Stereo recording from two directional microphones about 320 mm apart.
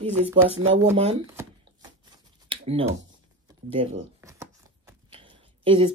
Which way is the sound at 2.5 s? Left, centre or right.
Centre.